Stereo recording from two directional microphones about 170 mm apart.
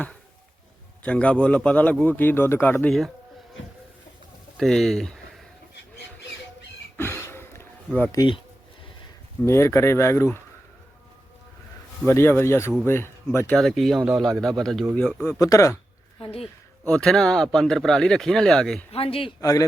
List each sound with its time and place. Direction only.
1.0 s a man's voice: 5° left (ahead or behind)
4.5 s speech: centre (ahead or behind)
6.9 s a sound: 15° left (ahead or behind)
8.1 s speech: 20° left (ahead or behind)
9.4 s a man's voice: 15° left (ahead or behind)
12.0 s a man's voice: 15° left (ahead or behind)
13.6 s a man's voice: centre (ahead or behind); by 15.8 s 15° left (ahead or behind)
16.2 s speech: 35° left (ahead or behind)
16.8 s speech: 5° left (ahead or behind)
18.9 s speech: 35° left (ahead or behind)
19.4 s speech: 20° left (ahead or behind)